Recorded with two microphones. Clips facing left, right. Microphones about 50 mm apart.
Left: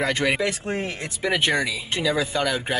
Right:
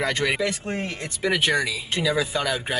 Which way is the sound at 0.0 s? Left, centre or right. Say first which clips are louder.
Left 1 dB; centre.